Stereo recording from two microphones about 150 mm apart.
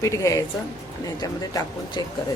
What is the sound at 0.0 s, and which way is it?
Speech, 20° left (ahead or behind).